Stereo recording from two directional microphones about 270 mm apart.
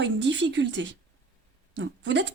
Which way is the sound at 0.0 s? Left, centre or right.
Right.